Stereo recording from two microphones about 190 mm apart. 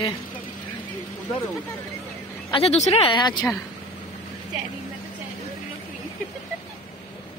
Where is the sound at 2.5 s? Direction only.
35° left (ahead or behind).